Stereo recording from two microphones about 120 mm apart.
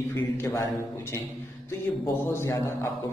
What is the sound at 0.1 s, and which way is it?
Speech, 20° left (ahead or behind).